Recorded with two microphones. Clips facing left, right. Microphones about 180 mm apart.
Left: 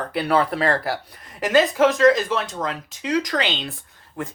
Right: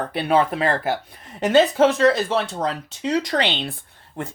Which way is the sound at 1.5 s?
30° right (ahead or behind).